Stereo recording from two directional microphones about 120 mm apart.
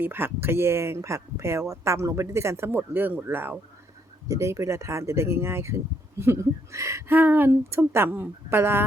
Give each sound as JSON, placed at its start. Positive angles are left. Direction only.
{"t": 0.0, "sound": "speech", "side_deg": -20}